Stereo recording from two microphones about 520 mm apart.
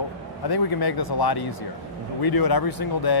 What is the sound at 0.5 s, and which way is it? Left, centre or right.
Speech, left.